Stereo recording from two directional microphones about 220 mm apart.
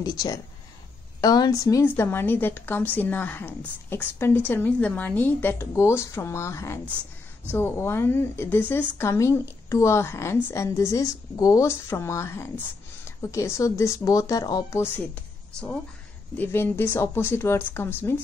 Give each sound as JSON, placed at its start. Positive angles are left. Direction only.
{"t": 0.0, "sound": "speech", "side_deg": 15}
{"t": 16.3, "sound": "speech", "side_deg": 10}